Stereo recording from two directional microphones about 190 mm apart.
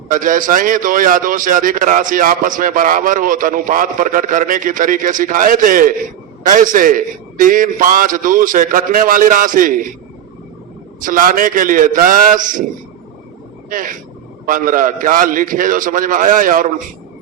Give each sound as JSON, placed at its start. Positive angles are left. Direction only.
{"t": 0.1, "sound": "a man's voice", "side_deg": -45}
{"t": 11.0, "sound": "a man's voice", "side_deg": -45}
{"t": 13.7, "sound": "a man's voice", "side_deg": -45}